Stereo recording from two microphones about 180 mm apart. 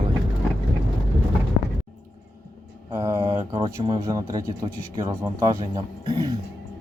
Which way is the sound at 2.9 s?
15° right (ahead or behind).